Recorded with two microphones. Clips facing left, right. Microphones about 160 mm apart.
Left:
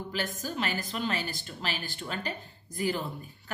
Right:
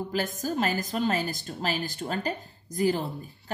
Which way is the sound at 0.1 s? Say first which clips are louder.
Right 4 dB; 40° right (ahead or behind).